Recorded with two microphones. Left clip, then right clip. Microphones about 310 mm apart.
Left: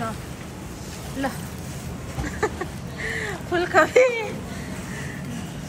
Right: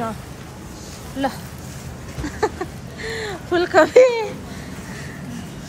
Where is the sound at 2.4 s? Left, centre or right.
Centre.